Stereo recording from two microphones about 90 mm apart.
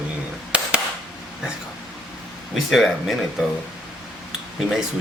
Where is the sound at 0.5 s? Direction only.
15° right (ahead or behind).